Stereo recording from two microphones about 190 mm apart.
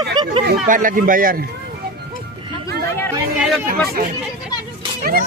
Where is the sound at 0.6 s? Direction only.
45° right (ahead or behind).